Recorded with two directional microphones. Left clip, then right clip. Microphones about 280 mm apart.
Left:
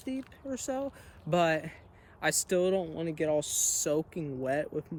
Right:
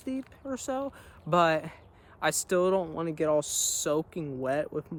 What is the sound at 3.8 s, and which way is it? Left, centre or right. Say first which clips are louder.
Speech: right 1 dB; centre.